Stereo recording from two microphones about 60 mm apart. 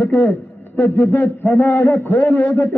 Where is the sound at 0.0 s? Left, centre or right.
Left.